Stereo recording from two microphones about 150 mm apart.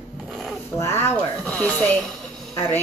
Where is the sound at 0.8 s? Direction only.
15° left (ahead or behind).